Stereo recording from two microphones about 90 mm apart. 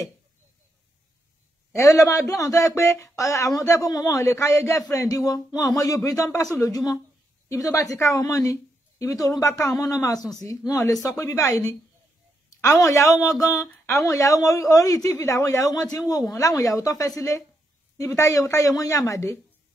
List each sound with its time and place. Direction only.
1.7 s a man's voice: 30° left (ahead or behind)